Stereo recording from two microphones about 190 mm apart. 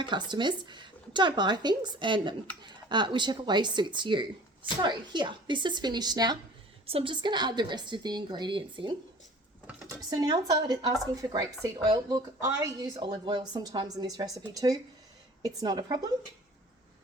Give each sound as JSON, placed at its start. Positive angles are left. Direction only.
{"t": 0.0, "sound": "speech", "side_deg": -25}
{"t": 9.6, "sound": "a sound", "side_deg": -10}
{"t": 10.1, "sound": "speech", "side_deg": -20}